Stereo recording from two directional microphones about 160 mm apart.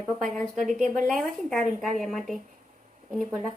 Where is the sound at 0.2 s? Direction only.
Centre (ahead or behind).